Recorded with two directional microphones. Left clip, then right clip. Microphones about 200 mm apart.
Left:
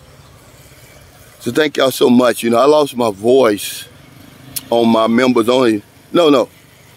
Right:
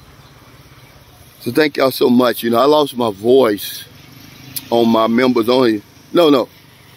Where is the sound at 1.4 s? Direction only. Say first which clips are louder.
Even; 20° left (ahead or behind).